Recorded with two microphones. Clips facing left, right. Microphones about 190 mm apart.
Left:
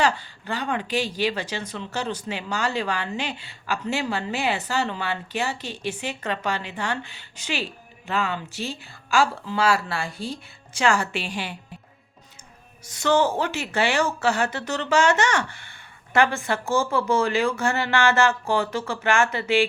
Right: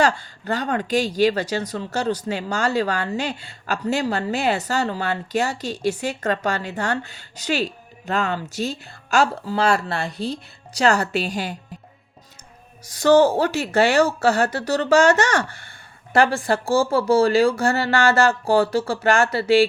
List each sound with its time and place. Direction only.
0.0 s a woman's voice: 45° right (ahead or behind)
12.8 s a woman's voice: 35° right (ahead or behind)